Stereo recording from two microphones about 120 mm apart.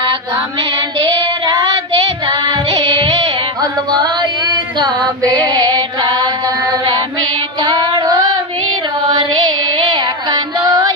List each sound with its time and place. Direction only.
2.2 s child singing: 40° right (ahead or behind)
3.6 s music: 35° right (ahead or behind)
7.6 s female singing: 35° right (ahead or behind)
9.0 s music: 40° right (ahead or behind)